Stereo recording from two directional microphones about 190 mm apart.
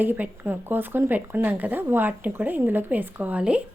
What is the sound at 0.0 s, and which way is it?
Speech, 10° right (ahead or behind).